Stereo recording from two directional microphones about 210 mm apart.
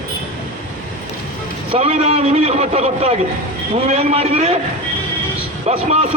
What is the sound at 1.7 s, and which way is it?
A man's voice, 30° right (ahead or behind).